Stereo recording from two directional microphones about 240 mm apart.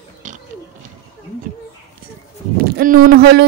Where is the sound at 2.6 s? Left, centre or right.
Right.